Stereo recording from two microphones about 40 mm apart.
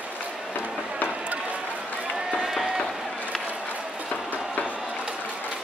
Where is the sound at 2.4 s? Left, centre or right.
Centre.